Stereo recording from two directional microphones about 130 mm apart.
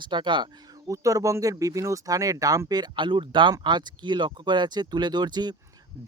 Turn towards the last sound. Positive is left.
turn(degrees=-35)  # may be behind; listen again after turning